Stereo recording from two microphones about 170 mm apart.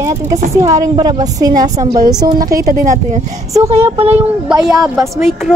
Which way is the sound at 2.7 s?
55° right (ahead or behind).